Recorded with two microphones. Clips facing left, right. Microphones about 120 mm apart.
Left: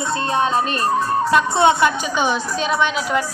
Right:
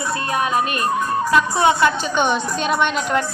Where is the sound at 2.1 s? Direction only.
Centre (ahead or behind).